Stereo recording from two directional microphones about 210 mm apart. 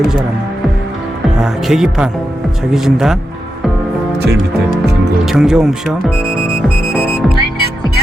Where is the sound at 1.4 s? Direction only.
5° right (ahead or behind).